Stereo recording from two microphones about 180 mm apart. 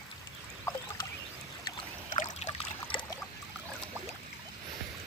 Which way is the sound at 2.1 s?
40° left (ahead or behind).